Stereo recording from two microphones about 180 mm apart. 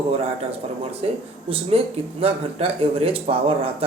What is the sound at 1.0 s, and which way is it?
Speech, 35° right (ahead or behind).